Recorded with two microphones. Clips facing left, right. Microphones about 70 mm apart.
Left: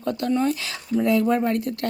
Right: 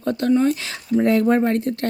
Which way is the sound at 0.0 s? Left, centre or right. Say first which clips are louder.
Right 4 dB; right.